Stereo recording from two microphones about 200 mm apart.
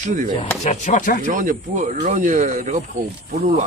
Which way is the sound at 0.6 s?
40° left (ahead or behind).